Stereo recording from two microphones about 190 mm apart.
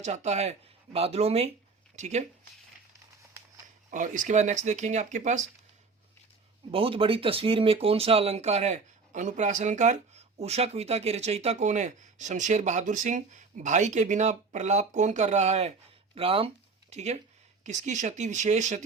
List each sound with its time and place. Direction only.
0.0 s speech: 35° right (ahead or behind)
3.9 s speech: 40° right (ahead or behind)
6.7 s speech: 30° right (ahead or behind)